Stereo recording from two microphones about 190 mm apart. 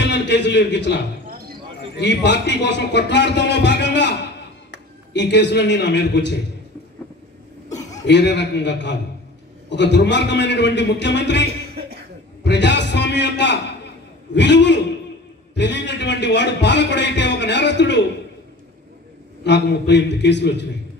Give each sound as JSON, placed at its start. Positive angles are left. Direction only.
{"t": 0.0, "sound": "a man's voice", "side_deg": 65}
{"t": 1.3, "sound": "a sound", "side_deg": -50}
{"t": 2.0, "sound": "a man's voice", "side_deg": 65}
{"t": 8.1, "sound": "a man's voice", "side_deg": 65}
{"t": 12.4, "sound": "a man's voice", "side_deg": 65}
{"t": 19.4, "sound": "a man's voice", "side_deg": 65}